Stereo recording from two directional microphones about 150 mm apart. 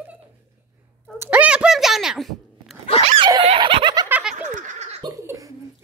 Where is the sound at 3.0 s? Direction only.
40° right (ahead or behind).